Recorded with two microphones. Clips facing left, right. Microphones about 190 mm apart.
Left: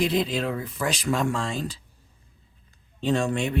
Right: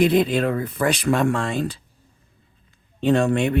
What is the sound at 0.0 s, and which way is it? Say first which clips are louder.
Speech: right 7 dB; 55° right (ahead or behind).